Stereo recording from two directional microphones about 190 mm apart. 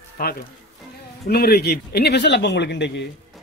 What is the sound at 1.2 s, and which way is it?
A man's voice, 55° left (ahead or behind).